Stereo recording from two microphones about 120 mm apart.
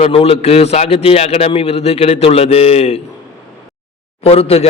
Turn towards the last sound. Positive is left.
turn(degrees=55)  # may be behind; listen again after turning